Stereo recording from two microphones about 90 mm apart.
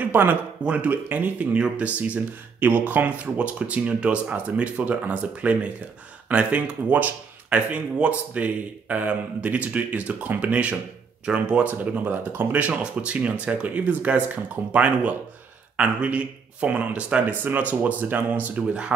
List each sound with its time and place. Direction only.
0.0 s speech: 20° right (ahead or behind)